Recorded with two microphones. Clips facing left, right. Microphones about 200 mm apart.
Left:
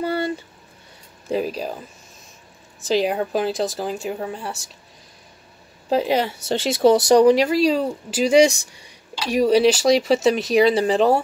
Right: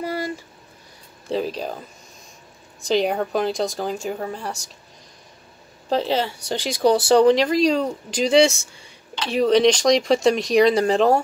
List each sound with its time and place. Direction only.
0.0 s a sound: 30° left (ahead or behind)
1.3 s speech: 10° left (ahead or behind)
2.8 s speech: centre (ahead or behind)
5.9 s speech: 10° left (ahead or behind)